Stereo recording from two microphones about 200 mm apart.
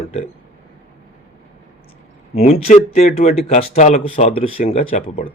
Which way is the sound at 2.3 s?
30° left (ahead or behind).